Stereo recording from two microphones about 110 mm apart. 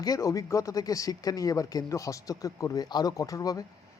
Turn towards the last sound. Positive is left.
turn(degrees=35)  # may be behind; listen again after turning